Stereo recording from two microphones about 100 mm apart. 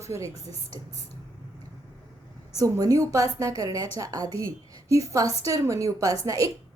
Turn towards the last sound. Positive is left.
turn(degrees=-35)  # may be behind; listen again after turning